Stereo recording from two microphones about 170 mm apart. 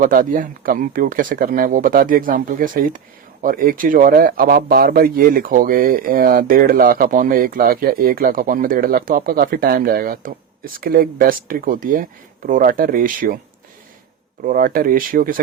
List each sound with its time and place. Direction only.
0.0 s speech: 55° right (ahead or behind)
14.4 s speech: 55° right (ahead or behind)